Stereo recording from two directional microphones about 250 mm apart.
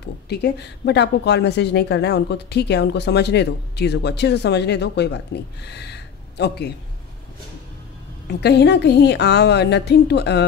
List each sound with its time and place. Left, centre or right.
0.3 s speech: left
8.3 s a woman's voice: left